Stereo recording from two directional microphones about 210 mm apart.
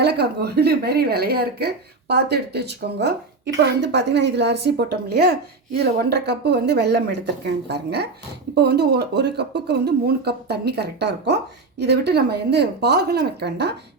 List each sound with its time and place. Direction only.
0.0 s speech: 50° right (ahead or behind)